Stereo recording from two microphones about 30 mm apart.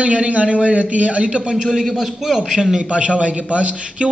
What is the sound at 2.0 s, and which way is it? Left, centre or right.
Speech, centre.